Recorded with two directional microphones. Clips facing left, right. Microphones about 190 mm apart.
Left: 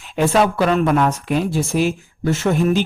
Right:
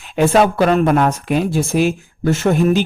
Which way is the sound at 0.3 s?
45° right (ahead or behind).